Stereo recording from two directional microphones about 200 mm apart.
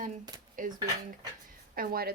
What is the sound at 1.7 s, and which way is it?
Speech, 45° right (ahead or behind).